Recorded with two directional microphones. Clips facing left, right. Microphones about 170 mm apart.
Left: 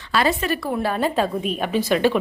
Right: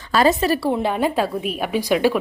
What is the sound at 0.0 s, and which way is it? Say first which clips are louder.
Speech: right 4 dB; 40° right (ahead or behind).